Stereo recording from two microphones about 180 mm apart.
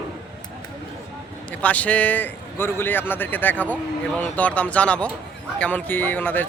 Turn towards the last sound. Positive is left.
turn(degrees=10)  # may be behind; listen again after turning